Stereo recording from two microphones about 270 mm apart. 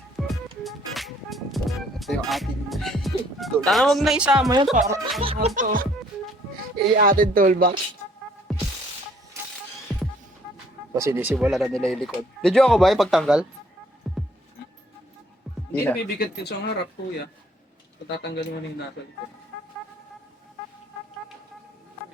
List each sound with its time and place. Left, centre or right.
0.3 s music: centre
4.5 s speech: right
8.5 s music: centre
9.9 s music: centre
10.9 s speech: centre
14.0 s music: centre
15.7 s speech: centre
16.0 s speech: left
18.2 s speech: left